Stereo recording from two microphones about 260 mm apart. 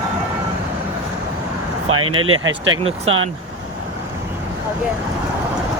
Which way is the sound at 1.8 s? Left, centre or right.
Right.